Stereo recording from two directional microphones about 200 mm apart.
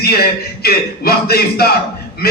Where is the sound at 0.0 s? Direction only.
50° left (ahead or behind).